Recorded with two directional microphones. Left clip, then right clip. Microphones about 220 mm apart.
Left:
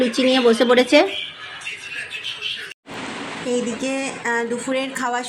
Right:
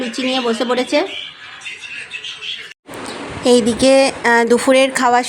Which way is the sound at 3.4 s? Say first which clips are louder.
Right 12 dB; 30° right (ahead or behind).